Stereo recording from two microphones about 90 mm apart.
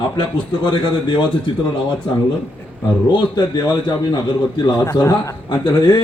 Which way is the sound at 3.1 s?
55° left (ahead or behind).